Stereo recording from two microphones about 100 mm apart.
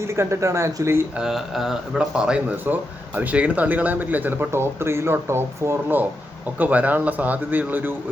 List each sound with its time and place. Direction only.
0.0 s speech: 30° right (ahead or behind)
1.1 s speech: 5° right (ahead or behind)